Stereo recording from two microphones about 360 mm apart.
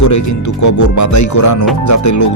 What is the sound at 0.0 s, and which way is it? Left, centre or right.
Speech, left.